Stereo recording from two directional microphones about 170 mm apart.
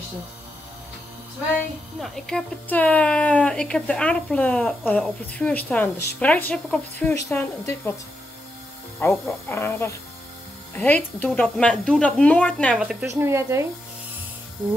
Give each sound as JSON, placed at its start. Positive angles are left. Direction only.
{"t": 2.0, "sound": "a woman's voice", "side_deg": 5}
{"t": 9.0, "sound": "a woman's voice", "side_deg": 10}
{"t": 13.0, "sound": "speech", "side_deg": -15}